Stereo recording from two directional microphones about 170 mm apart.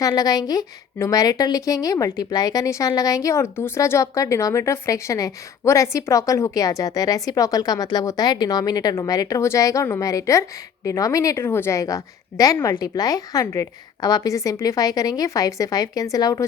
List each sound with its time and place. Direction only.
0.0 s a woman's voice: 20° left (ahead or behind)